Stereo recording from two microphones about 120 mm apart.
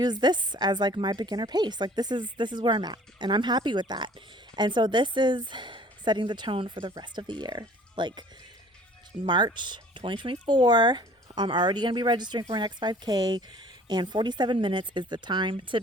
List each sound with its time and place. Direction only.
0.0 s speech: 35° right (ahead or behind)
9.2 s speech: 40° right (ahead or behind)